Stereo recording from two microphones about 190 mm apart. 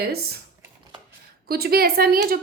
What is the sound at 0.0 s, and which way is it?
Speech, 55° right (ahead or behind).